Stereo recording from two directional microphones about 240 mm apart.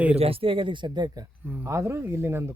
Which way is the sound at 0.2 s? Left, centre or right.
Right.